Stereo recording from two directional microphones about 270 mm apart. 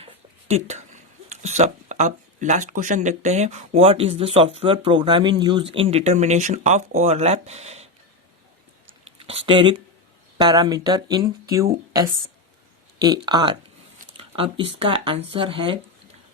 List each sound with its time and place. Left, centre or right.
0.0 s speech: right
9.0 s speech: right
14.2 s a sound: centre
14.8 s speech: centre